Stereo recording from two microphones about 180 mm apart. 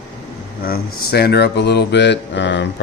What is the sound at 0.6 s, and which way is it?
Speech, 60° left (ahead or behind).